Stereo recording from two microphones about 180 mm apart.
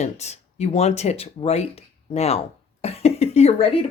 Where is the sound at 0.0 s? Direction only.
40° left (ahead or behind).